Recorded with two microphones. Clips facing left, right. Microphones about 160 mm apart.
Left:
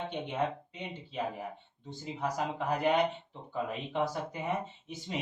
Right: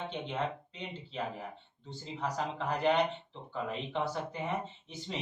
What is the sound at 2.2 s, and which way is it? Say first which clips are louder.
Speech: left 2 dB; 10° left (ahead or behind).